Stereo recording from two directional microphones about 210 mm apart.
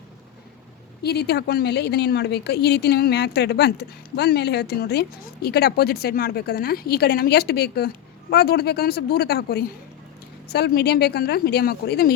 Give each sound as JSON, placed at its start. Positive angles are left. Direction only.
{"t": 1.0, "sound": "a woman's voice", "side_deg": 50}